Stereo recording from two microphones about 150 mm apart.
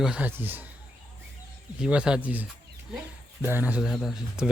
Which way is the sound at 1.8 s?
5° right (ahead or behind).